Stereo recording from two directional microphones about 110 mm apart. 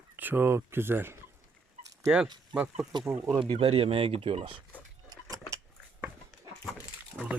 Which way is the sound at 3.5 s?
55° right (ahead or behind).